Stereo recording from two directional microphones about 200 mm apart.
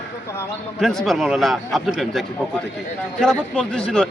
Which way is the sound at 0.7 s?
Centre (ahead or behind).